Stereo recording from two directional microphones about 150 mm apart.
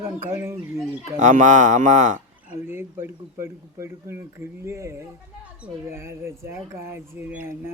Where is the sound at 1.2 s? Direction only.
55° right (ahead or behind).